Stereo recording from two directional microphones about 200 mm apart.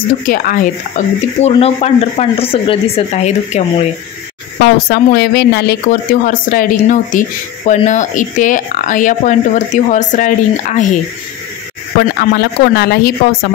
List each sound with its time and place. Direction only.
0.3 s speech: 45° left (ahead or behind)
4.8 s speech: 50° left (ahead or behind)
12.2 s speech: 50° left (ahead or behind)